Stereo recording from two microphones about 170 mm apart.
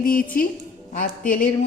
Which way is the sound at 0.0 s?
55° left (ahead or behind).